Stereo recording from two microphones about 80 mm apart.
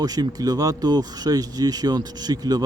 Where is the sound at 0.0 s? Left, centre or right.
Right.